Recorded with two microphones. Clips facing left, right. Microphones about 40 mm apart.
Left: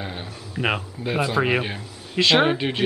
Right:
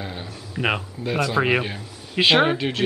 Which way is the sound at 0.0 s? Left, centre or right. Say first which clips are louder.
Even; centre.